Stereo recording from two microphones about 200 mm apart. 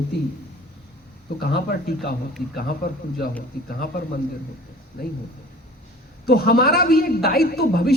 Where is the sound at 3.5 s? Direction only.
50° left (ahead or behind).